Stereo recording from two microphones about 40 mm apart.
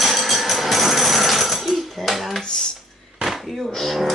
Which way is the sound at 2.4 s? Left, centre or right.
Centre.